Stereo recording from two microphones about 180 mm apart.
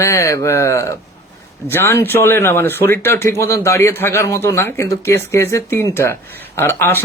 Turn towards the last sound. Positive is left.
turn(degrees=15)  # may be behind; listen again after turning